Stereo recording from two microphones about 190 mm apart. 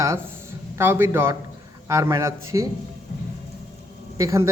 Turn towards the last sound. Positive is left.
turn(degrees=-15)  # may be behind; listen again after turning